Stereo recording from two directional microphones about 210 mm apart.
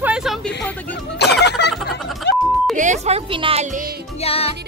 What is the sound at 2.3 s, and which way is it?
Music, 55° left (ahead or behind).